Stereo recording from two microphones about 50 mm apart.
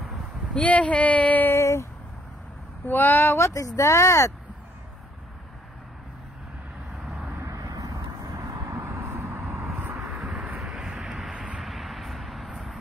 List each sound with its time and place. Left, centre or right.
0.6 s speech: left
1.5 s a sound: left
2.9 s speech: left
3.3 s speech: left
8.6 s a sound: right
9.5 s vehicle: right
10.1 s vehicle: centre
11.6 s vehicle: centre